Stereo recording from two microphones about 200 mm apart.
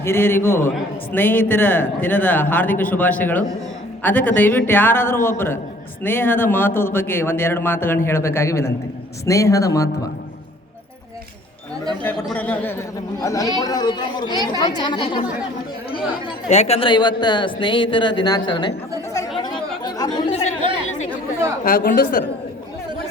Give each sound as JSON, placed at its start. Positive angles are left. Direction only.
{"t": 0.0, "sound": "a man's voice", "side_deg": 10}
{"t": 12.1, "sound": "a man's voice", "side_deg": 5}
{"t": 16.5, "sound": "speech", "side_deg": 35}
{"t": 19.8, "sound": "chatter", "side_deg": 20}
{"t": 21.6, "sound": "a woman's voice", "side_deg": 45}